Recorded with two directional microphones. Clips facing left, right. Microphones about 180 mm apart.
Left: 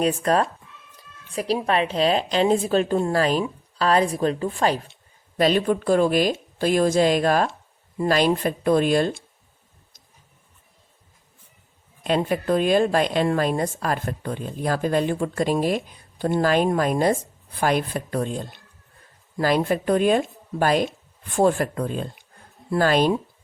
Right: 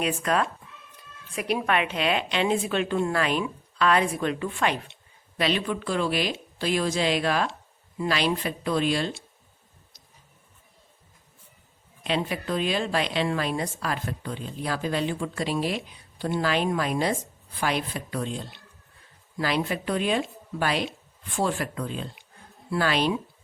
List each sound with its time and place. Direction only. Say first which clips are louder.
0.0 s a woman's voice: left 5 dB; 35° left (ahead or behind)
12.0 s a woman's voice: left 6 dB; 45° left (ahead or behind)